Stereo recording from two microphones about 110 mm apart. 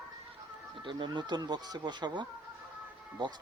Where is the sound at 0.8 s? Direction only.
45° right (ahead or behind).